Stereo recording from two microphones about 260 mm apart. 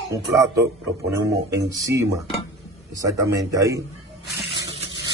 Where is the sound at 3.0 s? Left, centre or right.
Centre.